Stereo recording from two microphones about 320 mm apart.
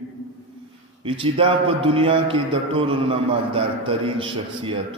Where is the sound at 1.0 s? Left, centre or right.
Centre.